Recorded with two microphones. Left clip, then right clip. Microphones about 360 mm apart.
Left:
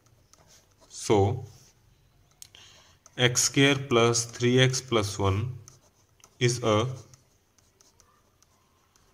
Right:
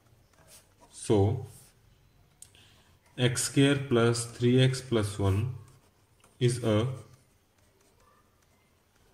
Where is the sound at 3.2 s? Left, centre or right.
Centre.